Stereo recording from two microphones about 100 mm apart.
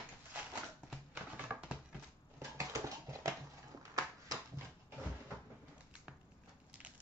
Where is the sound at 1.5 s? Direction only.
10° right (ahead or behind).